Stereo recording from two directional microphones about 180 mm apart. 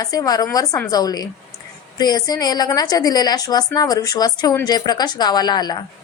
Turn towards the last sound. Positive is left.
turn(degrees=25)  # may be behind; listen again after turning